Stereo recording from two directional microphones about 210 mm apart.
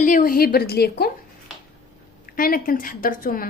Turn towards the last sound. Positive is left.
turn(degrees=40)  # may be behind; listen again after turning